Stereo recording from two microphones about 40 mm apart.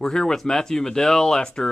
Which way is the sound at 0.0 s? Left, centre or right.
Centre.